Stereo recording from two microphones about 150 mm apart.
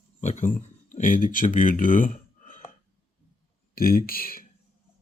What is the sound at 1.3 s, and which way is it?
Speech, 65° left (ahead or behind).